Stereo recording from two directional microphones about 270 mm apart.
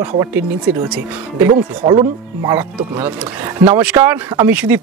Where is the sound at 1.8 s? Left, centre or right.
Centre.